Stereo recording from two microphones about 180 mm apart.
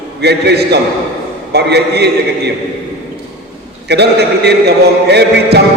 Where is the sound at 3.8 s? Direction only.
65° right (ahead or behind).